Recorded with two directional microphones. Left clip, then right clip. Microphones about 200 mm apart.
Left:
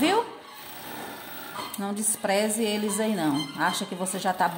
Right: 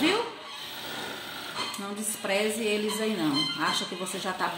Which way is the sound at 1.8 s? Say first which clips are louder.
Left 4 dB; 50° left (ahead or behind).